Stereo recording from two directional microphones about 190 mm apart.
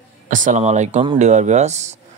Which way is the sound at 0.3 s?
40° right (ahead or behind).